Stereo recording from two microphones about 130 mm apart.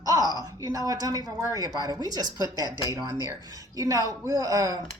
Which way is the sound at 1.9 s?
30° right (ahead or behind).